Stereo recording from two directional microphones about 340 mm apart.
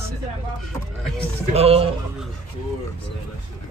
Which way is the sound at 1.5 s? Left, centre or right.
Centre.